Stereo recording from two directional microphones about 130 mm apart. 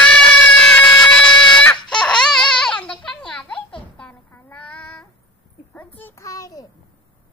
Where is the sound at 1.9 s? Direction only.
5° left (ahead or behind).